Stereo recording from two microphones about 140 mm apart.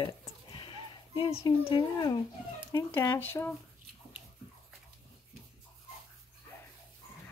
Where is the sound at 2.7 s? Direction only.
15° left (ahead or behind).